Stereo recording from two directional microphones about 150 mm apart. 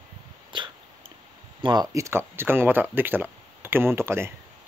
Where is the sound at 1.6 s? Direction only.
25° right (ahead or behind).